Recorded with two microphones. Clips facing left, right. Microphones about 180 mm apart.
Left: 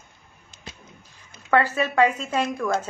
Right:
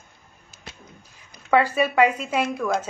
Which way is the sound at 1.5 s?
10° right (ahead or behind).